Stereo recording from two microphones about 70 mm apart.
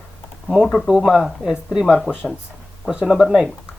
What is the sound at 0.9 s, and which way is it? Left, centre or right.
Speech, centre.